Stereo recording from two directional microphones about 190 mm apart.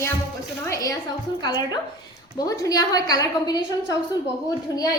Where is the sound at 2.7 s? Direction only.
20° left (ahead or behind).